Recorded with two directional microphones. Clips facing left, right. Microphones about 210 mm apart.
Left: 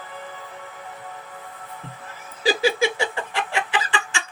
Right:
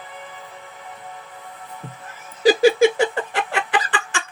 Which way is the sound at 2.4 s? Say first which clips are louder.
Right 7 dB; 50° right (ahead or behind).